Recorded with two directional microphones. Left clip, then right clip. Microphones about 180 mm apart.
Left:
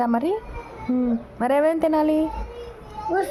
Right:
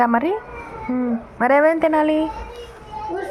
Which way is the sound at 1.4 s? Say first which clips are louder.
Right 5 dB; centre (ahead or behind).